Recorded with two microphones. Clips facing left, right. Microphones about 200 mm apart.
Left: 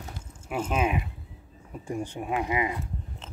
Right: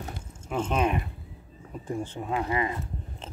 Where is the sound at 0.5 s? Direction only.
5° left (ahead or behind).